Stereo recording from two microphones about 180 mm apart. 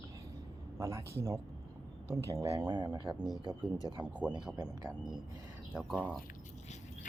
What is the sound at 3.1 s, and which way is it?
Speech, 5° right (ahead or behind).